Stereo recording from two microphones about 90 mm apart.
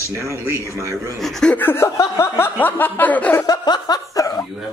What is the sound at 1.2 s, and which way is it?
Speech, 5° left (ahead or behind).